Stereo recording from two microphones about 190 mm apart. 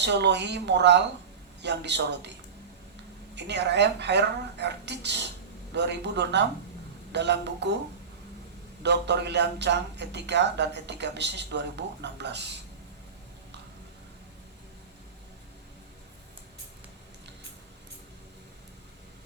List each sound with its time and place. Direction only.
0.0 s speech: 65° right (ahead or behind)
3.3 s speech: 65° right (ahead or behind)
8.8 s speech: 65° right (ahead or behind)